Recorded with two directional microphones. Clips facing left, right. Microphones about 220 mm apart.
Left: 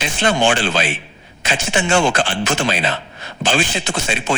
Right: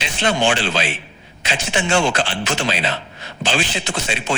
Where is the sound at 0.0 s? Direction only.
50° left (ahead or behind).